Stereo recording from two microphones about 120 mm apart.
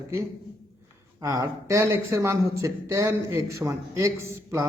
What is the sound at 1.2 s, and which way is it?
Speech, 25° right (ahead or behind).